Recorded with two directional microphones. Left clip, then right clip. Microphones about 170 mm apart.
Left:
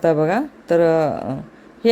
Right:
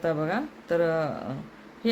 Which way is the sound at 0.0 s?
45° left (ahead or behind).